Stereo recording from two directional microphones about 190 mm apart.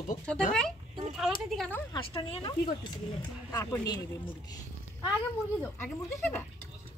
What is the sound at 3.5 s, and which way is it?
Speech, 20° left (ahead or behind).